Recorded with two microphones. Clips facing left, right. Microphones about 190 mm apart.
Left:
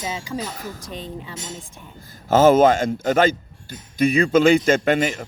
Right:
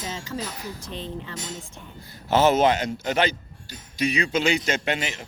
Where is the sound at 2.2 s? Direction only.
45° left (ahead or behind).